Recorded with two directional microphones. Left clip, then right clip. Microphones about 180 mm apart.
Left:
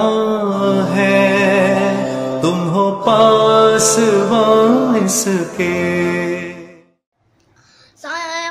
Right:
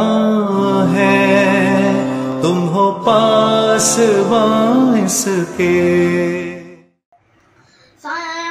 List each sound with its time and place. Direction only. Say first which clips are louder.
0.0 s music: even; centre (ahead or behind)
8.0 s child singing: even; 25° left (ahead or behind)